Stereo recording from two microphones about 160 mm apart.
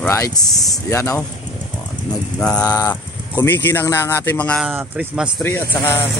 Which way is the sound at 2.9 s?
15° left (ahead or behind).